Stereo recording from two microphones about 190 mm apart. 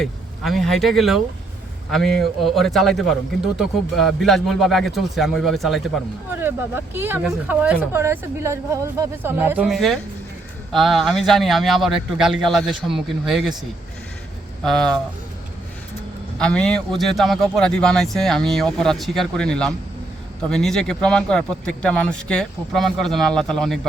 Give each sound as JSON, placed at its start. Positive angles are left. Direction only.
{"t": 0.0, "sound": "speech", "side_deg": 0}
{"t": 6.4, "sound": "speech", "side_deg": -10}
{"t": 14.6, "sound": "speech", "side_deg": 5}
{"t": 16.4, "sound": "speech", "side_deg": 5}